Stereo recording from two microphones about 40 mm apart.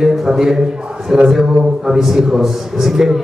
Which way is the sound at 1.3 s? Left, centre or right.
Centre.